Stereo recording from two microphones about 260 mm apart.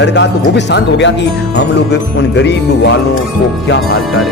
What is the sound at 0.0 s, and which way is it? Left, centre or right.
Speech, left.